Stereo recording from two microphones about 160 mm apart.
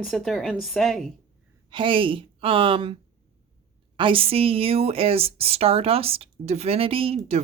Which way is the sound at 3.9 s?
35° right (ahead or behind).